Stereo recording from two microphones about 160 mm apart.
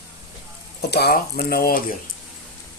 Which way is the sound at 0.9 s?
85° left.